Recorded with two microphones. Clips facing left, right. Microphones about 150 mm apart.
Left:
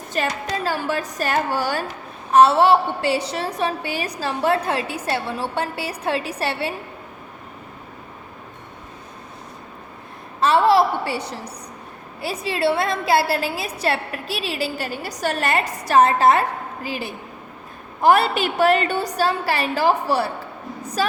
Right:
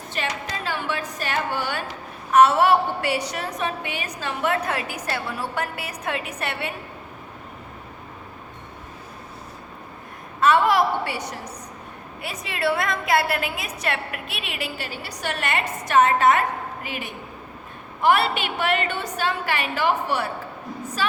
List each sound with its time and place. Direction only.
0.1 s a woman's voice: 40° left (ahead or behind)
10.4 s a woman's voice: 30° left (ahead or behind)